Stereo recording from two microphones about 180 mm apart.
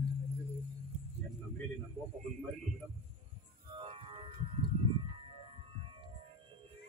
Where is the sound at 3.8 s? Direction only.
30° right (ahead or behind).